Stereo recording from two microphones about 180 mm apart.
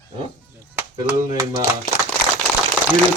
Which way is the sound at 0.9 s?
20° right (ahead or behind).